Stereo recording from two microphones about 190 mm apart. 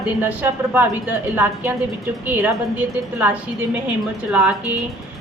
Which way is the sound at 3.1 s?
10° right (ahead or behind).